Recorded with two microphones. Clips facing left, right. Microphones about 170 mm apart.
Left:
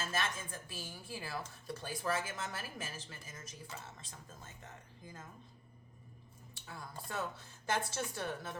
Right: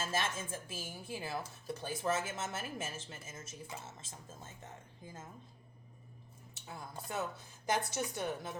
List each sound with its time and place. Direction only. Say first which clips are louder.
0.0 s speech: right 2 dB; 25° right (ahead or behind)
6.5 s speech: right 2 dB; 20° right (ahead or behind)